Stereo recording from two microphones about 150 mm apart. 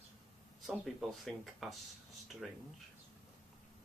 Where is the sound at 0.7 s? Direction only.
Centre (ahead or behind).